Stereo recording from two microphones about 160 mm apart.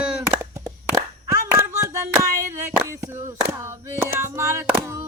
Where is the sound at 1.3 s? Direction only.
20° right (ahead or behind).